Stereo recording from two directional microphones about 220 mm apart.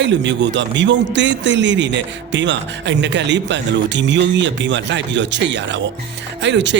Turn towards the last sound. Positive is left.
turn(degrees=-55)  # may be behind; listen again after turning